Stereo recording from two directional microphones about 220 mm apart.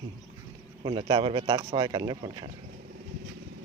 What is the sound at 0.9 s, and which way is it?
Speech, 20° right (ahead or behind).